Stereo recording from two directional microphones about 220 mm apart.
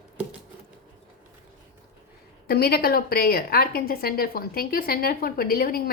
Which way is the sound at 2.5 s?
45° left (ahead or behind).